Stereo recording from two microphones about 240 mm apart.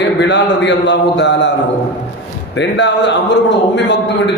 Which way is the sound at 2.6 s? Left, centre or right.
Left.